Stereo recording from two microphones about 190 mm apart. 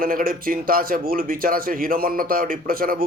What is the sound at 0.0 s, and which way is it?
A man's voice, 50° right (ahead or behind).